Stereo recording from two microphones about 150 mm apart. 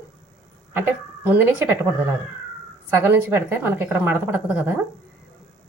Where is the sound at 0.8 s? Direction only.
15° right (ahead or behind).